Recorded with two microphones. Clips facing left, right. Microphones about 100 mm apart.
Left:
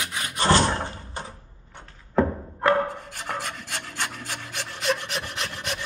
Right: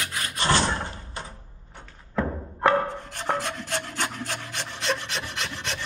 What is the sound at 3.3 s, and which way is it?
Filing, 90° right.